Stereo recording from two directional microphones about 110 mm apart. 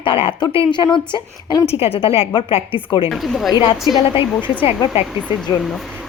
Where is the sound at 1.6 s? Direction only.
65° left (ahead or behind).